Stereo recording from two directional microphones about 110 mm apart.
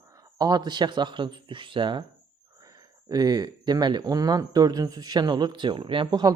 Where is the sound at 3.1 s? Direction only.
35° right (ahead or behind).